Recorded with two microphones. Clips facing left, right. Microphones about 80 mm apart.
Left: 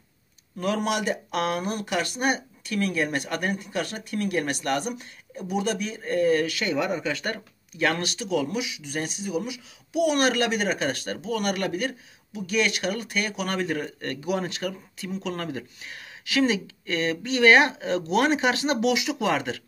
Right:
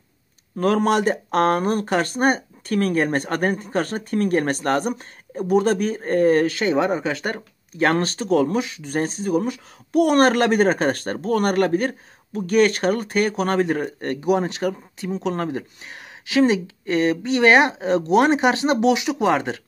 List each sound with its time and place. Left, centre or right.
0.6 s speech: right